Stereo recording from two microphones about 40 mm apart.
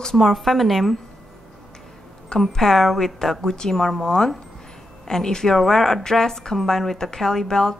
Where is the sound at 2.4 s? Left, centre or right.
Centre.